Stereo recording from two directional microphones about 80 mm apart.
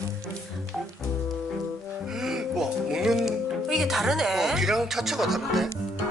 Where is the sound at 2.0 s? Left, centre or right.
Centre.